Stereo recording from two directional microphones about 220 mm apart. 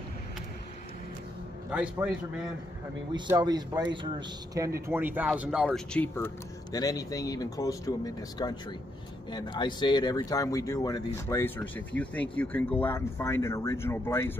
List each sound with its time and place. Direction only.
1.7 s a man's voice: 5° right (ahead or behind)
3.3 s speech: 15° right (ahead or behind); by 14.4 s 10° left (ahead or behind)